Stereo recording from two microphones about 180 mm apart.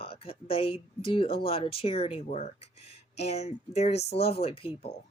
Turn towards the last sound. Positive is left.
turn(degrees=35)  # may be behind; listen again after turning